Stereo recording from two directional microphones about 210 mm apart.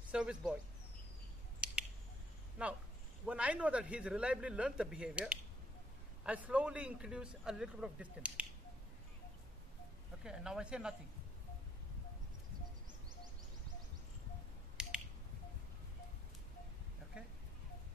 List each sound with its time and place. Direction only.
0.1 s a man's voice: 5° right (ahead or behind)
1.6 s a sound: 5° right (ahead or behind)
2.6 s a man's voice: 5° right (ahead or behind)
10.2 s a man's voice: 5° right (ahead or behind)
14.8 s finger snapping: 5° right (ahead or behind)